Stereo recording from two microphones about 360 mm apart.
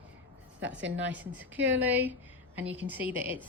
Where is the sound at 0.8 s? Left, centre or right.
Right.